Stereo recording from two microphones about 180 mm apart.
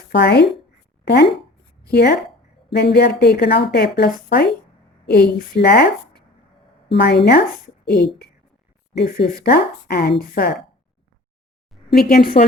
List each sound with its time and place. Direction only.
0.1 s a woman's voice: 70° left (ahead or behind)
6.9 s a woman's voice: 70° left (ahead or behind)
12.1 s a woman's voice: 55° left (ahead or behind)